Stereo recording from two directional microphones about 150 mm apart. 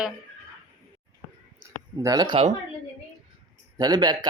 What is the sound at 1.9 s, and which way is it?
Speech, 25° right (ahead or behind).